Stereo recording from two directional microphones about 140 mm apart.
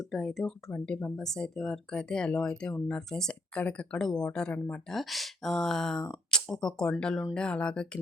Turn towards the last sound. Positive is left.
turn(degrees=5)  # may be behind; listen again after turning